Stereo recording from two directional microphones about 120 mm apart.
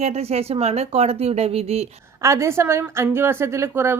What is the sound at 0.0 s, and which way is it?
Speech, 60° right (ahead or behind).